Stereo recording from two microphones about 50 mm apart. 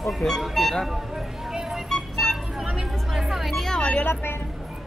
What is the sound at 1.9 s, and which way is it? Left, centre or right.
Music, centre.